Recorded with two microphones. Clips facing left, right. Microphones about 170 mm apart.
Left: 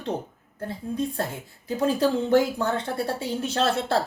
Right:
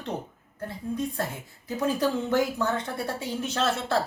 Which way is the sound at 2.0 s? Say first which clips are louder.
Left 5 dB; 30° left (ahead or behind).